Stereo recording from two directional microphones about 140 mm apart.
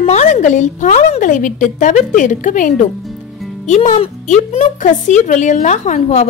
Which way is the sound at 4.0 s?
45° left (ahead or behind).